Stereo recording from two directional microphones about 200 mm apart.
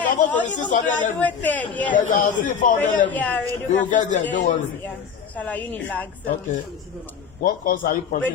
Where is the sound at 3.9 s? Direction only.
40° left (ahead or behind).